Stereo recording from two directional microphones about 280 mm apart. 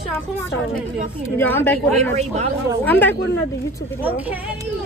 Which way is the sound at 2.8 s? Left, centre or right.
Centre.